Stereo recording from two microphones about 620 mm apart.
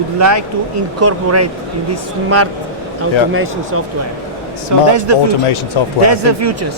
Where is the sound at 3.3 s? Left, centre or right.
Centre.